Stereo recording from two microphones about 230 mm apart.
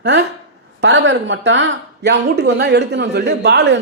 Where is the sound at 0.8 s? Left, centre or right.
Right.